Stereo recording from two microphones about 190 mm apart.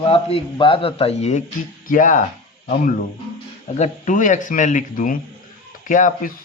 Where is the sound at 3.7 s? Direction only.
40° left (ahead or behind).